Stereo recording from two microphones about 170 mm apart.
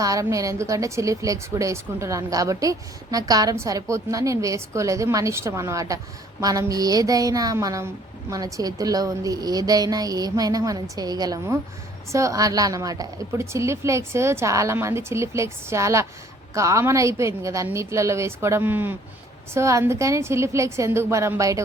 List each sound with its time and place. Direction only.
0.0 s a woman's voice: 20° right (ahead or behind)